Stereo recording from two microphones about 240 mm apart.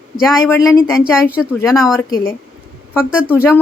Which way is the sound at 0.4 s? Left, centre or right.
Centre.